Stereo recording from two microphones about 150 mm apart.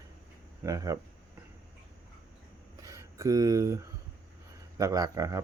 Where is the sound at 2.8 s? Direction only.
20° right (ahead or behind).